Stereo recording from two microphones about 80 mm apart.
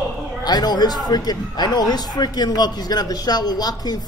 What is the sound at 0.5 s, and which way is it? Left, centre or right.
A man's voice, left.